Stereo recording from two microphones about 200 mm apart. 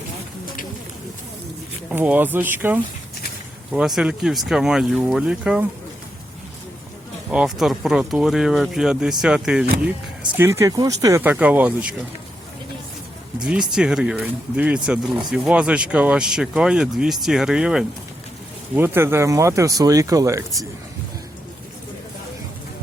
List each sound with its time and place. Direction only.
1.9 s speech: 10° right (ahead or behind)
7.3 s speech: 5° right (ahead or behind)
13.4 s speech: 5° right (ahead or behind)